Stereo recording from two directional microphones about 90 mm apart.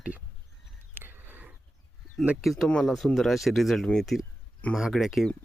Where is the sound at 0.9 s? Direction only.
25° right (ahead or behind).